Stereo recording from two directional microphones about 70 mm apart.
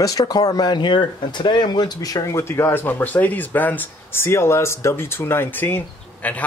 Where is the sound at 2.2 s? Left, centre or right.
Left.